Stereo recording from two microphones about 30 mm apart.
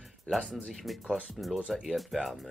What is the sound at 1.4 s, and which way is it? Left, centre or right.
Speech, centre.